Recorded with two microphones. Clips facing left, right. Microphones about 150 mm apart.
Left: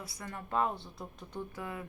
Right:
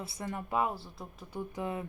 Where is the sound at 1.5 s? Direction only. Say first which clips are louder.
Right 5 dB; 20° right (ahead or behind).